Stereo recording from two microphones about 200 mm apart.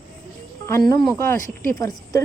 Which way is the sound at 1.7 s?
15° left (ahead or behind).